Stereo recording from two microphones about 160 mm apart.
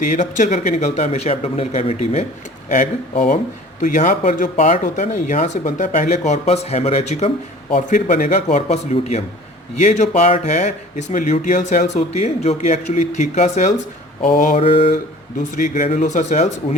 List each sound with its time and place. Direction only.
0.1 s speech: 50° left (ahead or behind)